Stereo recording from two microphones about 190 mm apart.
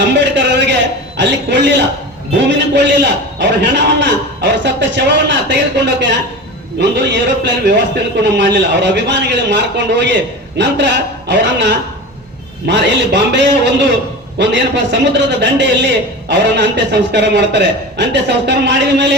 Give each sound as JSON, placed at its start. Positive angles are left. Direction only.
{"t": 0.0, "sound": "a man's voice", "side_deg": -65}